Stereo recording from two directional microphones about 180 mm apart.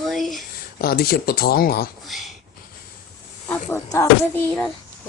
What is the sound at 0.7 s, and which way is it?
Speech, 60° left (ahead or behind).